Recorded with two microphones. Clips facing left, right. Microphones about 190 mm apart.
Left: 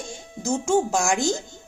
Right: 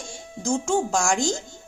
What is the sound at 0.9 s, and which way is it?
Speech, 5° left (ahead or behind).